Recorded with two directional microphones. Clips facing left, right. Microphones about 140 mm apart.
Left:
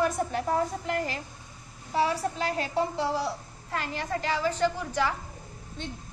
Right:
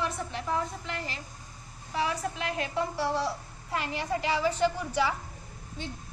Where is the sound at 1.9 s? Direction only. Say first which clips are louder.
Left 4 dB; 30° left (ahead or behind).